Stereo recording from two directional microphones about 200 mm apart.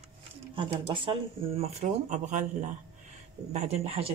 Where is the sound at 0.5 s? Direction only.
25° right (ahead or behind).